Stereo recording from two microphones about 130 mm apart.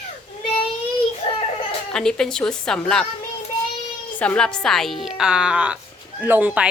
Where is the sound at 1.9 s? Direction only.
5° left (ahead or behind).